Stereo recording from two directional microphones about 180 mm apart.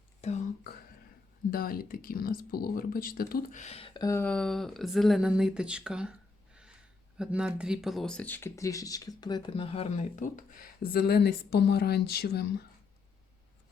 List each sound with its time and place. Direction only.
0.2 s whispering: 40° left (ahead or behind)
1.5 s speech: 55° left (ahead or behind)
3.6 s speech: 35° left (ahead or behind); by 12.6 s 60° left (ahead or behind)